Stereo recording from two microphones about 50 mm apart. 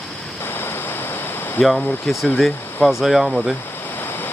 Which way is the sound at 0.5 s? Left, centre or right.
Left.